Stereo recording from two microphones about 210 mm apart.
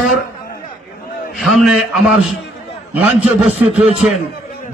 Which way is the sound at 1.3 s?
Centre (ahead or behind).